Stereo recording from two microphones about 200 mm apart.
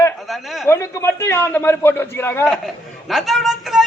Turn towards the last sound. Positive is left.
turn(degrees=0)  # may be behind; listen again after turning